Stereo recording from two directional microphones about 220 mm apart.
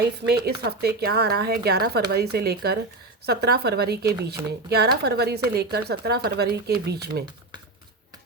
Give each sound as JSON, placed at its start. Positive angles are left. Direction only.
{"t": 0.0, "sound": "speech", "side_deg": -45}